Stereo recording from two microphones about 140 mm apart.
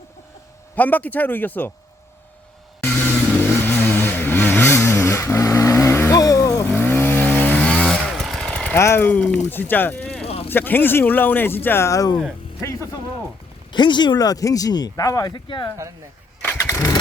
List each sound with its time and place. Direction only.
0.8 s speech: 10° left (ahead or behind)
3.6 s vehicle: 15° left (ahead or behind)
8.7 s speech: 20° left (ahead or behind)
10.2 s a sound: 45° left (ahead or behind)
10.5 s speech: 15° left (ahead or behind)
13.7 s speech: 35° left (ahead or behind)
16.4 s engine starting: 15° left (ahead or behind)